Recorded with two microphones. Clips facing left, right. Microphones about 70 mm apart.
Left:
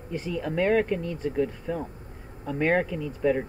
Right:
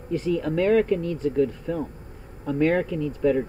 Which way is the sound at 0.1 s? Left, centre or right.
Centre.